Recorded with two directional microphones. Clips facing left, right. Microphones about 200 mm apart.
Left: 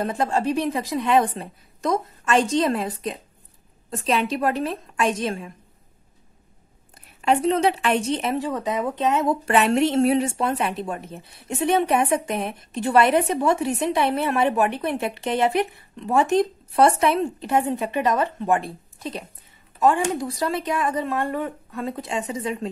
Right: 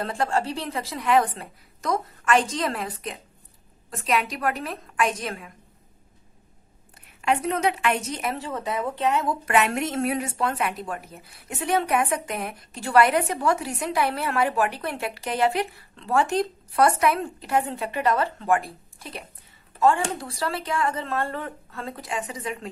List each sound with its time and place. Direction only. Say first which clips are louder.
0.0 s speech: left 3 dB; 20° left (ahead or behind)
7.2 s speech: left 5 dB; 30° left (ahead or behind)